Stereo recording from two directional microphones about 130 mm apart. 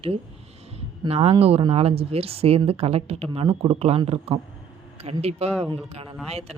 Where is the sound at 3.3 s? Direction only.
40° right (ahead or behind).